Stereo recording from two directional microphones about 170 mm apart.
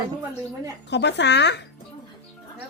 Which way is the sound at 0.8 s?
90° left.